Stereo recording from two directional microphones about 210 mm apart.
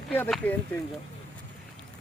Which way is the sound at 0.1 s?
10° left (ahead or behind).